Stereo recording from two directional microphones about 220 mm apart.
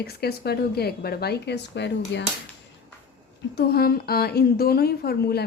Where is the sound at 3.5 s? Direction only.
45° left (ahead or behind).